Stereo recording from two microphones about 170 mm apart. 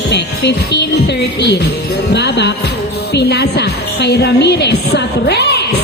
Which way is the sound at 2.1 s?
75° left (ahead or behind).